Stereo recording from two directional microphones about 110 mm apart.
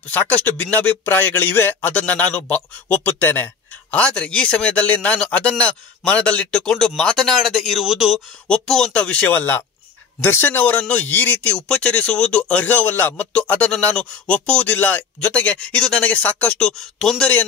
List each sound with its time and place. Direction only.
0.1 s speech: 15° left (ahead or behind)